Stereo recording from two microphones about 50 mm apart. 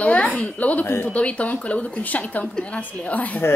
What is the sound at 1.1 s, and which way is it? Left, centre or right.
A woman's voice, left.